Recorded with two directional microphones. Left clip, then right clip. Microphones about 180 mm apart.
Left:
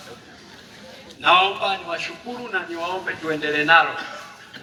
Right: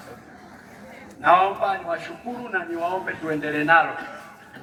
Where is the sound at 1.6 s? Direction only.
30° right (ahead or behind).